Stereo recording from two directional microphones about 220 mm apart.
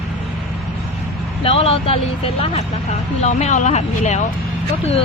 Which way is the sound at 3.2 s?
30° left (ahead or behind).